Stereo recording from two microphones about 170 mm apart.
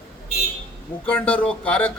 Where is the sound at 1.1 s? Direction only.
10° left (ahead or behind).